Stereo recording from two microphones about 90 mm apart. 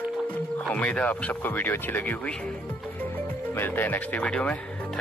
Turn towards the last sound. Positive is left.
turn(degrees=15)  # may be behind; listen again after turning